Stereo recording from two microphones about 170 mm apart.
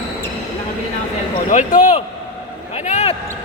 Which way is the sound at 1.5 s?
45° left (ahead or behind).